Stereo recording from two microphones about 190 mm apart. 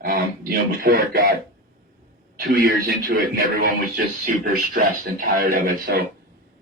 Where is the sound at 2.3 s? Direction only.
50° right (ahead or behind).